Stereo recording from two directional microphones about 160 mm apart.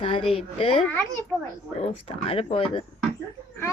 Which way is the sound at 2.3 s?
35° left (ahead or behind).